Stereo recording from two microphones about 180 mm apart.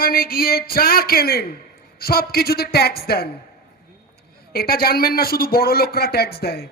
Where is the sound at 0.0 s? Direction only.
55° left (ahead or behind).